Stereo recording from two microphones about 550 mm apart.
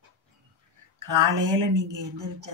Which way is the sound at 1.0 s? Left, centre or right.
Right.